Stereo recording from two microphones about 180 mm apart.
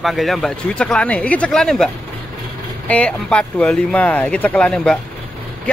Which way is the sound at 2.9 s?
5° left (ahead or behind).